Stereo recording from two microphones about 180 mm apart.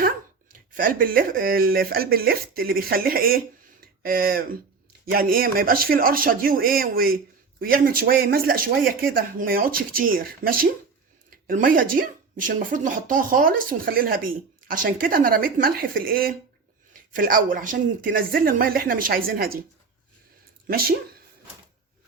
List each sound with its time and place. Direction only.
0.8 s a woman's voice: 50° right (ahead or behind)
20.7 s speech: 55° right (ahead or behind)